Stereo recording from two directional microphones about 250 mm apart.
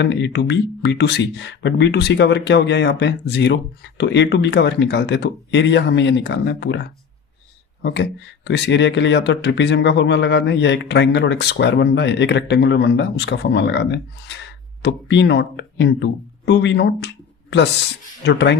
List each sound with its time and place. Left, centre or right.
0.0 s speech: left
18.3 s speech: left